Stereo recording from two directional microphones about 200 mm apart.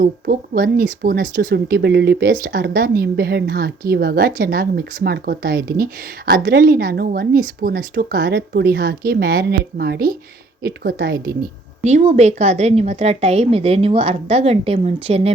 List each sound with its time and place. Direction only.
0.0 s speech: 45° right (ahead or behind)
11.8 s a woman's voice: 35° right (ahead or behind)